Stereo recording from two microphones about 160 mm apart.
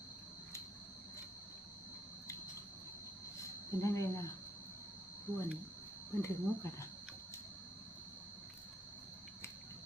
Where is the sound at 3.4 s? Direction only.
20° left (ahead or behind).